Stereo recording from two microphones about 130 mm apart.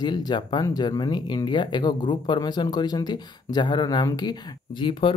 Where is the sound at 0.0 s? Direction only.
35° left (ahead or behind).